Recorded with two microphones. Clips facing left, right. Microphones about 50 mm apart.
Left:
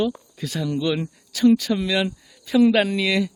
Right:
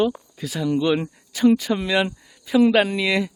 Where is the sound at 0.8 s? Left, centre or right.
Right.